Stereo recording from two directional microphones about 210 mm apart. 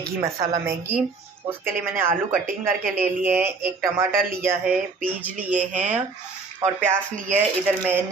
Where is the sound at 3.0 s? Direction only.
10° right (ahead or behind).